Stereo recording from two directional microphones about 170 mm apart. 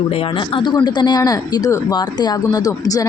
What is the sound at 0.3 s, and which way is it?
A woman's voice, 25° left (ahead or behind).